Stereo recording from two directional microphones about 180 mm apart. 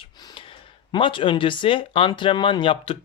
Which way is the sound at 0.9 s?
30° left (ahead or behind).